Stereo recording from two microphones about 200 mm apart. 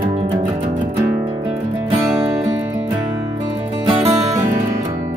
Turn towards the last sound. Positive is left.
turn(degrees=-20)  # may be behind; listen again after turning